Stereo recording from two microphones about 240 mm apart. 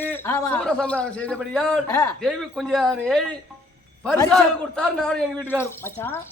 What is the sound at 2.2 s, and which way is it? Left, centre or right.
A man's voice, centre.